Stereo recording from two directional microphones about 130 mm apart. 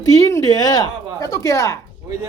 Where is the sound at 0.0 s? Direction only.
25° left (ahead or behind).